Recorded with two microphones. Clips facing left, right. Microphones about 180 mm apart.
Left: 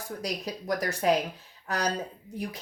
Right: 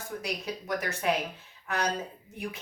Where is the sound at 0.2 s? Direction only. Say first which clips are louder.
Left 3 dB; 40° left (ahead or behind).